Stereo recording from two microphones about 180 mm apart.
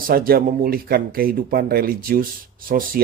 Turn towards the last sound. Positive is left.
turn(degrees=-50)  # may be behind; listen again after turning